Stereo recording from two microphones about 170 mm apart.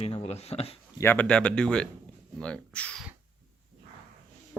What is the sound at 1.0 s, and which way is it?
Speech, 10° left (ahead or behind).